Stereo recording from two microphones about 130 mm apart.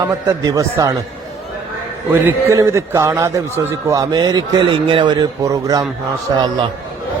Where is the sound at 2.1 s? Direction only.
15° right (ahead or behind).